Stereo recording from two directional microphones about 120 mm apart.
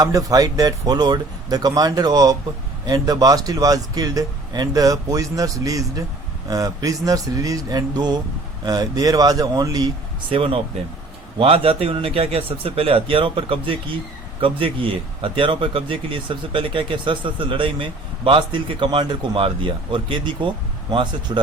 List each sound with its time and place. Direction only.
0.0 s speech: 30° right (ahead or behind)
10.2 s speech: 50° right (ahead or behind)